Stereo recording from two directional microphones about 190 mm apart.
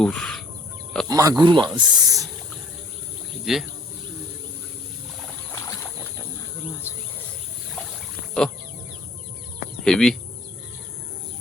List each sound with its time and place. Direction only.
0.0 s chicken: 5° left (ahead or behind)
1.0 s speech: 20° right (ahead or behind)
3.4 s speech: centre (ahead or behind)
5.5 s boat: 10° left (ahead or behind)
9.8 s speech: 5° left (ahead or behind)